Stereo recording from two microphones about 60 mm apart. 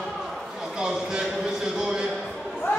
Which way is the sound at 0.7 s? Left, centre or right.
Centre.